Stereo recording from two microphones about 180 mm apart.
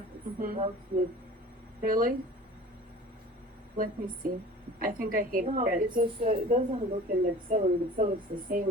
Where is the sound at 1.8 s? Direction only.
50° right (ahead or behind).